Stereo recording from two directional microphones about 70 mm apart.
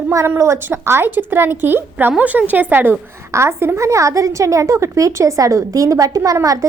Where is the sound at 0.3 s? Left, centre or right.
Right.